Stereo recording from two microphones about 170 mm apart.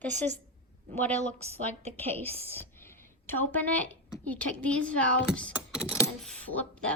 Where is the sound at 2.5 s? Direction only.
15° left (ahead or behind).